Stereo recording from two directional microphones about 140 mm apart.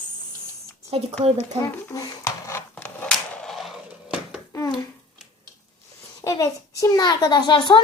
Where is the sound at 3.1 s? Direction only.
5° left (ahead or behind).